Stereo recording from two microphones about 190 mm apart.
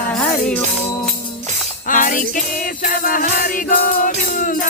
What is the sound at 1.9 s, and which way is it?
Music, 45° left (ahead or behind).